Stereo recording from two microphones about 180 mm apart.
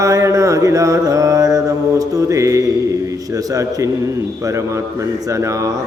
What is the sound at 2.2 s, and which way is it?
Mantra, 15° right (ahead or behind).